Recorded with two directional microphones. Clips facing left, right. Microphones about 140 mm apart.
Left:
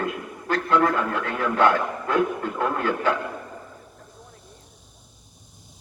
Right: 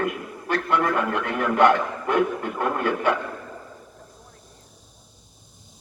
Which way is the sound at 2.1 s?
15° right (ahead or behind).